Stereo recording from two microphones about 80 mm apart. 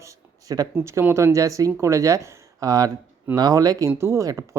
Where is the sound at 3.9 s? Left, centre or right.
Right.